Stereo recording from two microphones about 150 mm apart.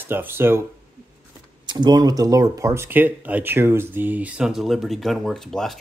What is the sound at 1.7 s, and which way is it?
Speech, 30° right (ahead or behind).